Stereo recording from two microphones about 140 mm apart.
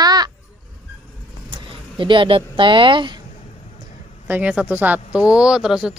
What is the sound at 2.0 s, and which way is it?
Speech, 35° right (ahead or behind).